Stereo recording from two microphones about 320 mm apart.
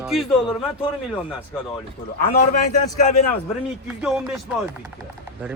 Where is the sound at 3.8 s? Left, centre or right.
Centre.